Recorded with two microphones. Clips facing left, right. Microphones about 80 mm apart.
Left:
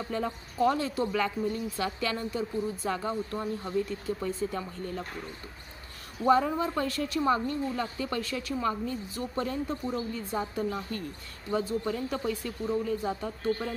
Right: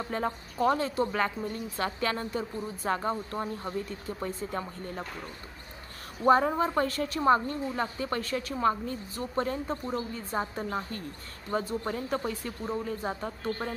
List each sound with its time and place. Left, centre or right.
0.0 s a woman's voice: right
6.2 s a woman's voice: right